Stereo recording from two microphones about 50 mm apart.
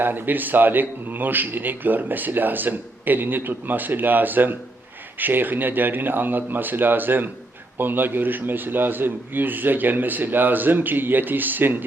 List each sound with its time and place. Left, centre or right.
0.0 s a man's voice: right